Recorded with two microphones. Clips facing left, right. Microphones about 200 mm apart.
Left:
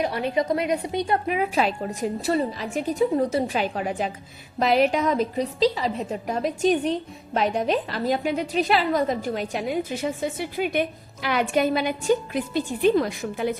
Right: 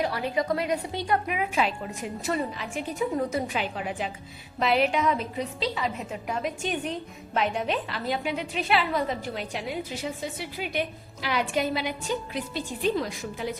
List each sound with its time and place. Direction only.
0.0 s a woman's voice: 20° left (ahead or behind); by 13.5 s 60° left (ahead or behind)